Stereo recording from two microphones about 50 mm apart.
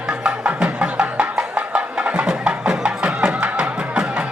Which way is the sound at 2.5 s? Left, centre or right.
Centre.